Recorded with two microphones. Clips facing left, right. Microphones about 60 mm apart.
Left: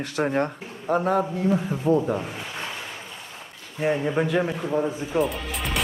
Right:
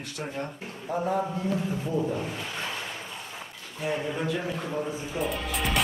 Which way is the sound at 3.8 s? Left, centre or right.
Left.